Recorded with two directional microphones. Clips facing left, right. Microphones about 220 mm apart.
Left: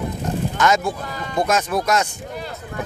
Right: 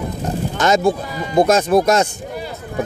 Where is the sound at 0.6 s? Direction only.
30° right (ahead or behind).